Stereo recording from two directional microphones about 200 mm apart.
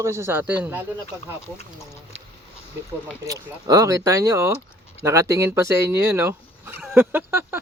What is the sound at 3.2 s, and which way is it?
A man's voice, 15° right (ahead or behind).